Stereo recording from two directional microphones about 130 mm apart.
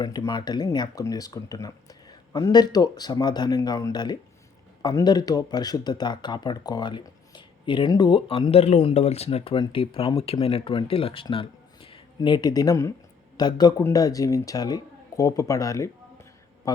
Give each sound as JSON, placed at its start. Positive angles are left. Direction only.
{"t": 0.0, "sound": "a man's voice", "side_deg": 30}